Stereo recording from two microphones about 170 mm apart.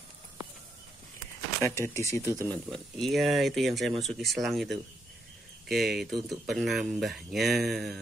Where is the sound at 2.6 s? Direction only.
Centre (ahead or behind).